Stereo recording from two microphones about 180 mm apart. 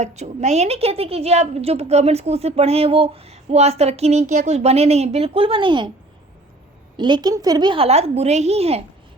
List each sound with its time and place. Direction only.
0.0 s a woman's voice: 40° right (ahead or behind)
6.9 s a woman's voice: 25° right (ahead or behind)